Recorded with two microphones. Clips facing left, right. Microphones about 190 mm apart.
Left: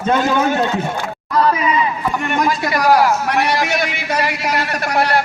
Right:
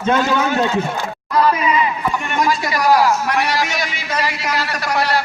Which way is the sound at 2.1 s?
55° left (ahead or behind).